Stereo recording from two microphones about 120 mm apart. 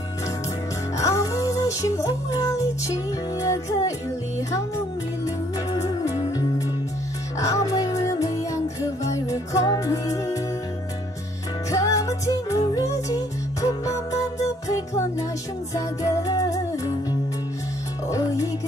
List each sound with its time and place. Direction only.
0.9 s music: 25° left (ahead or behind)
7.3 s music: 25° left (ahead or behind)
11.7 s music: 30° left (ahead or behind)
18.1 s music: 25° left (ahead or behind)